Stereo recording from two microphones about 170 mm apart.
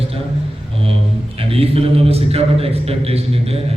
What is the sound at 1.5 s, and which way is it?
A man's voice, 35° right (ahead or behind).